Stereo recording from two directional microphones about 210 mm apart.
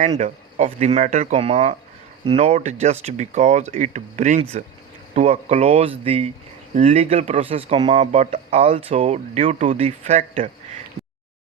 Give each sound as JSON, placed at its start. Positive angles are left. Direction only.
{"t": 0.2, "sound": "speech", "side_deg": -35}